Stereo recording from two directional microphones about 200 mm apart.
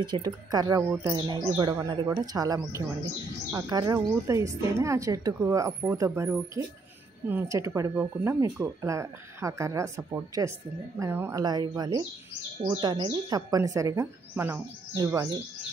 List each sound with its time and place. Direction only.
0.0 s speech: 20° right (ahead or behind)
0.8 s speech: 10° right (ahead or behind)
1.1 s speech: 25° right (ahead or behind)